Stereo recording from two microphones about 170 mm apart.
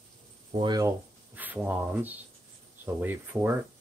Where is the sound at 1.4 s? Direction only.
10° right (ahead or behind).